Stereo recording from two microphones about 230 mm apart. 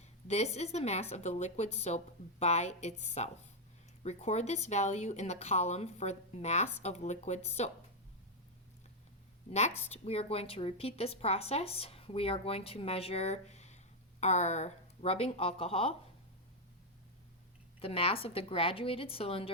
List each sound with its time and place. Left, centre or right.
0.0 s a woman's voice: left
9.5 s speech: left
17.7 s speech: left